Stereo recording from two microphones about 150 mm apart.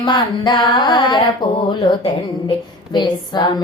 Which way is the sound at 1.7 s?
30° left (ahead or behind).